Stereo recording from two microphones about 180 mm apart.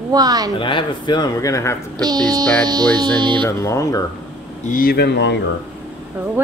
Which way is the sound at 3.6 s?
15° left (ahead or behind).